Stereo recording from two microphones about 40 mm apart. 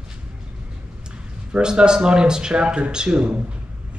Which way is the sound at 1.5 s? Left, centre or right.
Right.